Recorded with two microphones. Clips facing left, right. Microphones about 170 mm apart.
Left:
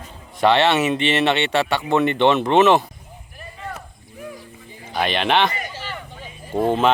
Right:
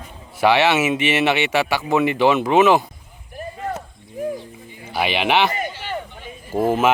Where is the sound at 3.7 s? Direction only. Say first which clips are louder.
Right 6 dB; 45° right (ahead or behind).